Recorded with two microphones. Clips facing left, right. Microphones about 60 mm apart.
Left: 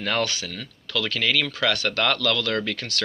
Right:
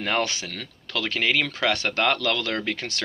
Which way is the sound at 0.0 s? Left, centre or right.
Right.